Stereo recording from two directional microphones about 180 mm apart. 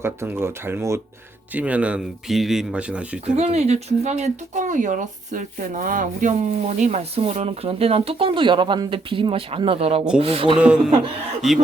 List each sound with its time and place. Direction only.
0.0 s speech: 15° right (ahead or behind)
3.3 s speech: 35° right (ahead or behind)
10.6 s speech: 5° right (ahead or behind)